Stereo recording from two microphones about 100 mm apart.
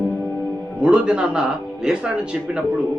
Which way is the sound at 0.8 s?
10° right (ahead or behind).